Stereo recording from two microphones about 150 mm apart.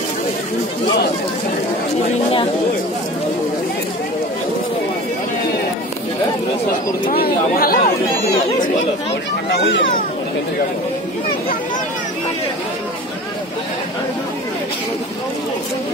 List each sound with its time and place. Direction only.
7.1 s speech: 80° left